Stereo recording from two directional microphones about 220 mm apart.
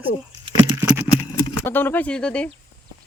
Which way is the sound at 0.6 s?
15° right (ahead or behind).